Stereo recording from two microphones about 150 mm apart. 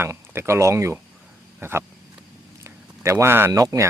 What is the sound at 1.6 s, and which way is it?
Cricket, 15° right (ahead or behind).